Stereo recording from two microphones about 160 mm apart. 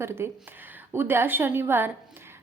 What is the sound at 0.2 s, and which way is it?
A woman's voice, 15° right (ahead or behind).